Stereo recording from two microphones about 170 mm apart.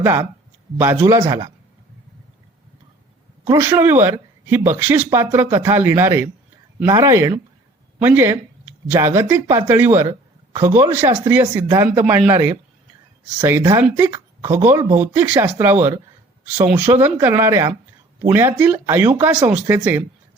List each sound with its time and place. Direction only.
0.0 s speech: 15° right (ahead or behind)
3.4 s speech: 15° right (ahead or behind)